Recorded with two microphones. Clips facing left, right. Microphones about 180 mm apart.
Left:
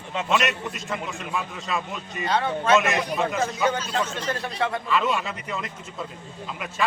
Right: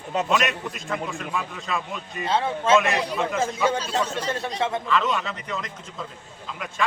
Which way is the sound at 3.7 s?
30° right (ahead or behind).